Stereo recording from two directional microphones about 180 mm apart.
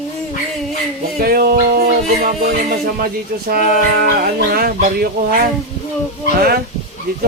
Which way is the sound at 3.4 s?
55° right (ahead or behind).